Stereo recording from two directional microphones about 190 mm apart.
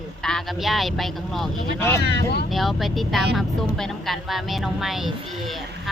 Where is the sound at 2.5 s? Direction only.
Centre (ahead or behind).